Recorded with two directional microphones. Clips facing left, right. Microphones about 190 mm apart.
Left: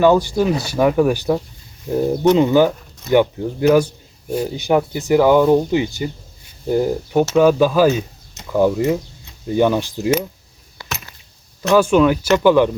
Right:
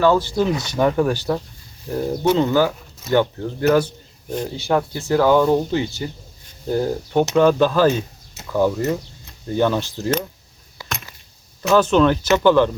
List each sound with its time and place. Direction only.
0.0 s speech: 15° left (ahead or behind)
11.8 s speech: 10° left (ahead or behind)